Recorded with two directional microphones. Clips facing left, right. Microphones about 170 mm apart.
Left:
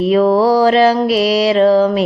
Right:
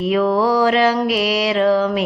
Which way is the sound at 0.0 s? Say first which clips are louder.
Left 5 dB; 35° left (ahead or behind).